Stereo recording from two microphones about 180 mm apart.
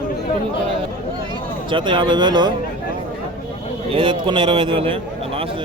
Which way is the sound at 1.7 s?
25° right (ahead or behind).